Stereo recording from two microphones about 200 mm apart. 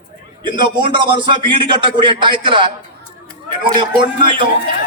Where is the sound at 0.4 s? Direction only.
25° right (ahead or behind).